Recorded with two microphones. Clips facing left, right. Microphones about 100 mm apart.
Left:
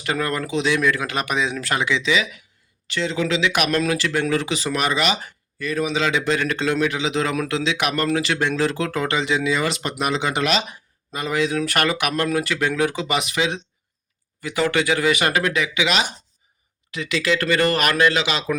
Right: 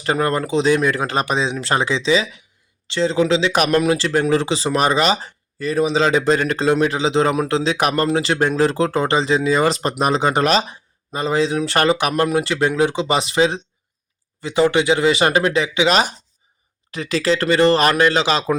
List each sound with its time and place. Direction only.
0.0 s speech: 30° right (ahead or behind)